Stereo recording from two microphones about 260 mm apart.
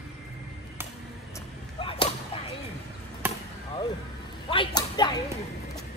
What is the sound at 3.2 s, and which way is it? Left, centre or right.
Basketball bounce, centre.